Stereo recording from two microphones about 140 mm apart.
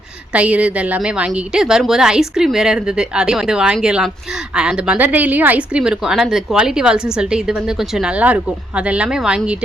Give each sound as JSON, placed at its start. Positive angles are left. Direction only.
{"t": 0.3, "sound": "a woman's voice", "side_deg": -10}